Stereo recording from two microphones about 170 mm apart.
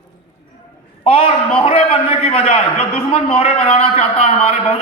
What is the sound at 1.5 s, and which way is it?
A man's voice, 35° left (ahead or behind).